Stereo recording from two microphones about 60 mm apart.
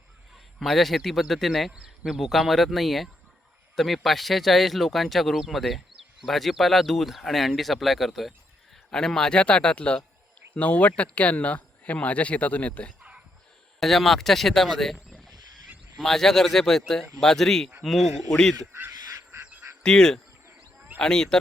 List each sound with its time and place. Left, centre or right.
0.6 s speech: centre
1.7 s speech: centre
2.1 s speech: centre
8.9 s speech: centre
13.0 s whispering: centre
13.7 s speech: centre
16.0 s speech: centre
19.8 s speech: centre
20.7 s a sound: right
21.0 s speech: centre